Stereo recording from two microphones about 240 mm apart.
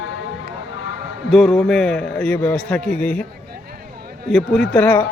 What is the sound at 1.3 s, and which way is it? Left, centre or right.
A man's voice, centre.